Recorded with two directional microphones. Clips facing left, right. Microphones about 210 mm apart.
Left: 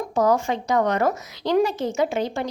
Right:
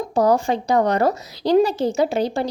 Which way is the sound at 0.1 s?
35° right (ahead or behind).